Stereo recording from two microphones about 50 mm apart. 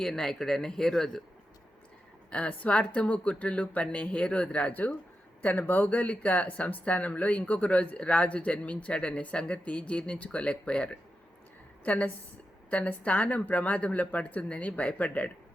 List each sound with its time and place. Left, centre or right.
0.0 s speech: centre
2.3 s speech: left
11.8 s a woman's voice: left